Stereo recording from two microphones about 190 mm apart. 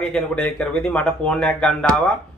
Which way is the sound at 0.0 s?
5° left (ahead or behind).